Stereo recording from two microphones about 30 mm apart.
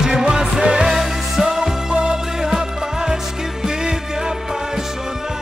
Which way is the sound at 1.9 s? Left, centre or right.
Right.